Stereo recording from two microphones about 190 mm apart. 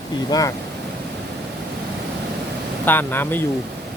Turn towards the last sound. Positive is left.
turn(degrees=10)  # may be behind; listen again after turning